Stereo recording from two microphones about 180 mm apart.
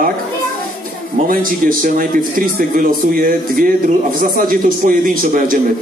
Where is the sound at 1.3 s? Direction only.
50° right (ahead or behind).